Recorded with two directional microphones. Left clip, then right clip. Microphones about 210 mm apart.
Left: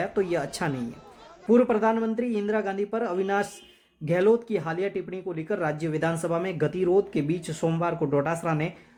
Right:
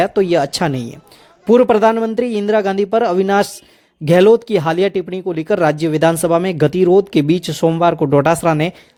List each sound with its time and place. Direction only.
0.0 s speech: 40° right (ahead or behind)